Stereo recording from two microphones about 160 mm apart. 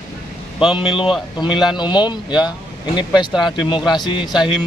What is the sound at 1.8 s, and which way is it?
Speech, 30° left (ahead or behind).